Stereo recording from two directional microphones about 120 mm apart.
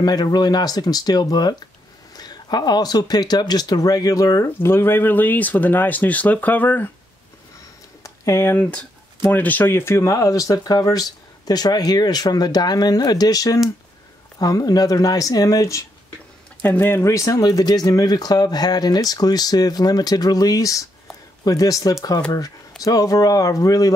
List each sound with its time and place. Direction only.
0.0 s speech: 35° left (ahead or behind); by 6.9 s 15° left (ahead or behind)
8.0 s speech: 25° left (ahead or behind)
16.6 s speech: 20° left (ahead or behind)